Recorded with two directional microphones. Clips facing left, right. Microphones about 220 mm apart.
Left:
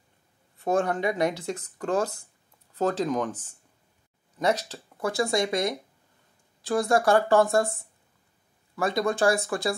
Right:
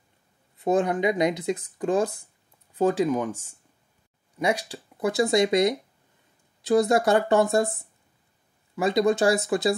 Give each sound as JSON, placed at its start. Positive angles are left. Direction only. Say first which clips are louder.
{"t": 0.7, "sound": "speech", "louder": "right 3 dB", "side_deg": -20}
{"t": 8.7, "sound": "speech", "louder": "right 4 dB", "side_deg": -20}